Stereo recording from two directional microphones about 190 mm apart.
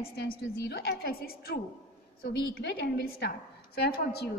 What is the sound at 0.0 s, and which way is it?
A woman's voice, 55° left (ahead or behind).